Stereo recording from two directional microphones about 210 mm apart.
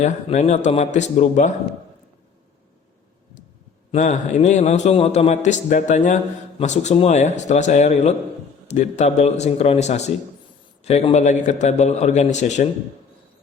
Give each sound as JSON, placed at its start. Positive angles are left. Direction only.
{"t": 0.0, "sound": "a man's voice", "side_deg": 30}
{"t": 3.9, "sound": "a man's voice", "side_deg": 35}